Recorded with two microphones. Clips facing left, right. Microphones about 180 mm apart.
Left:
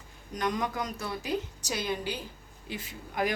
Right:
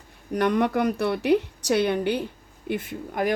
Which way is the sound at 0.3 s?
65° right (ahead or behind).